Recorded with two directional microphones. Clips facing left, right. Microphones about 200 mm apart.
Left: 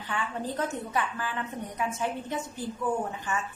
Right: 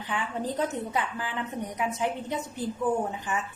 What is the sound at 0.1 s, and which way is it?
A woman's voice, 15° right (ahead or behind).